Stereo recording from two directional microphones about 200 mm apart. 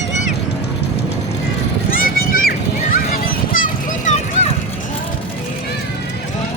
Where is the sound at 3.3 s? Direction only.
45° left (ahead or behind).